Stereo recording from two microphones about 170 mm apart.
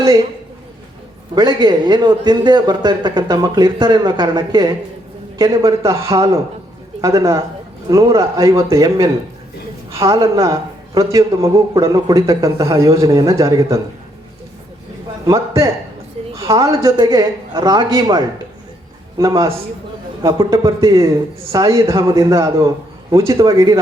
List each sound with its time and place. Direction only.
0.0 s a man's voice: 20° right (ahead or behind)
1.4 s a man's voice: 25° right (ahead or behind)
15.3 s a man's voice: 15° right (ahead or behind)
20.2 s a man's voice: 20° right (ahead or behind)